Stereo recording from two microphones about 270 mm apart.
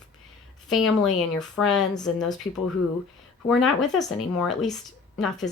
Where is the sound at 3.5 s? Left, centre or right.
Centre.